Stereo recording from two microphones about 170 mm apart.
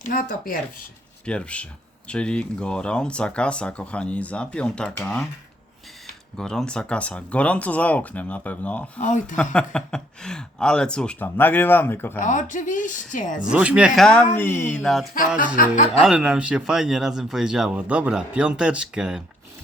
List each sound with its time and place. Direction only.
0.0 s speech: 55° left (ahead or behind)
1.2 s speech: 5° left (ahead or behind)
6.3 s speech: 5° left (ahead or behind)
9.0 s speech: 45° left (ahead or behind)
9.3 s speech: 5° left (ahead or behind)
12.2 s speech: 50° left (ahead or behind)
13.4 s speech: 5° right (ahead or behind); by 14.8 s 15° left (ahead or behind)
15.2 s speech: 50° left (ahead or behind)
15.9 s speech: centre (ahead or behind)